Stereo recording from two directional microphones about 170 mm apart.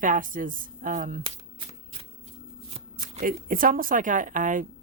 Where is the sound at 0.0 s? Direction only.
50° right (ahead or behind).